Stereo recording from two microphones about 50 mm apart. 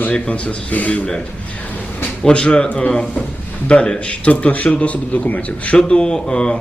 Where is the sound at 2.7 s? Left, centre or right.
Left.